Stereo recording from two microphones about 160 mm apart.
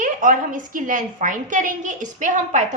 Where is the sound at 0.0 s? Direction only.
55° right (ahead or behind).